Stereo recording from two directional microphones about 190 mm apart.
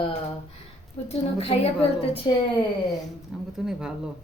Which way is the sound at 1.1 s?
30° left (ahead or behind).